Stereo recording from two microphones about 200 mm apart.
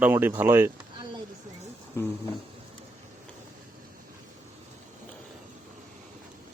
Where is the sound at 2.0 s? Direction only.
10° left (ahead or behind).